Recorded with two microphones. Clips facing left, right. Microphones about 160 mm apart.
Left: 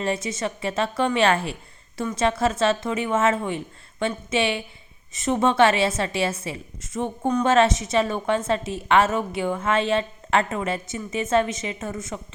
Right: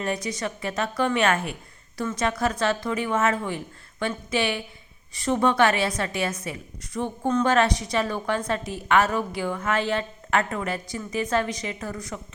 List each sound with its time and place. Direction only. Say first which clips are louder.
0.0 s a woman's voice: left 2 dB; 25° left (ahead or behind)